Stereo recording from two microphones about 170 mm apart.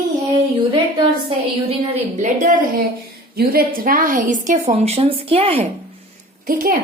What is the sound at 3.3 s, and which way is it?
A woman's voice, 60° right (ahead or behind).